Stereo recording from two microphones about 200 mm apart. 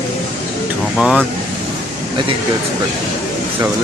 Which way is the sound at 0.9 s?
Centre (ahead or behind).